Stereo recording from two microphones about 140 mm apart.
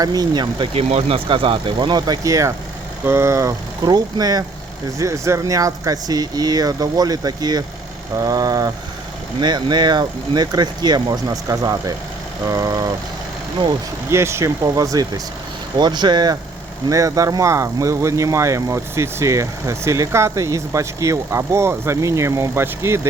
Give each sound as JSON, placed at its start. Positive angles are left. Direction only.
{"t": 0.0, "sound": "speech", "side_deg": -25}
{"t": 0.7, "sound": "speech", "side_deg": -45}
{"t": 14.1, "sound": "speech", "side_deg": -20}